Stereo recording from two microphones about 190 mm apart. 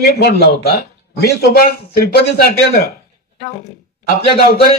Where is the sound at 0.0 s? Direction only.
55° left (ahead or behind).